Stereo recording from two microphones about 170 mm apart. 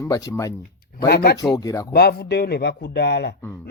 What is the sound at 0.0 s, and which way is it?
Speech, 20° left (ahead or behind).